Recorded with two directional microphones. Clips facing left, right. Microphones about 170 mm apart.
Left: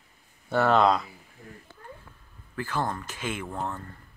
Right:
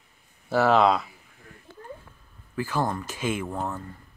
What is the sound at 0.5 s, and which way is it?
Speech, 5° right (ahead or behind).